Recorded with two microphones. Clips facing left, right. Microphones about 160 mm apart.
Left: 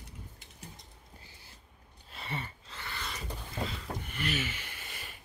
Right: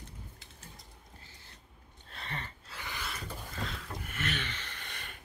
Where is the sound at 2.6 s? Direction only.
10° right (ahead or behind).